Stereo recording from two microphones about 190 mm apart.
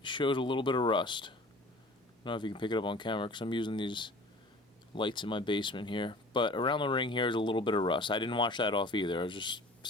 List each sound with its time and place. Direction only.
0.0 s speech: 25° left (ahead or behind)